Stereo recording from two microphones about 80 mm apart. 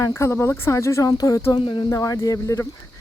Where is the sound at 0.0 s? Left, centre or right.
Left.